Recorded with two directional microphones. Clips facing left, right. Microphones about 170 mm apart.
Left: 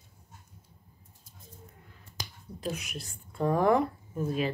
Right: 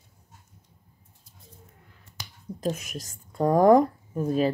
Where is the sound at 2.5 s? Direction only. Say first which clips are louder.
Right 6 dB; 40° right (ahead or behind).